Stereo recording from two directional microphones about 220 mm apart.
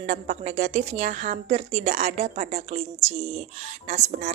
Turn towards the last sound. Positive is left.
turn(degrees=-35)  # may be behind; listen again after turning